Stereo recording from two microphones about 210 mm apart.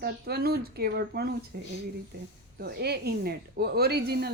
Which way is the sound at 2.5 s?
50° right (ahead or behind).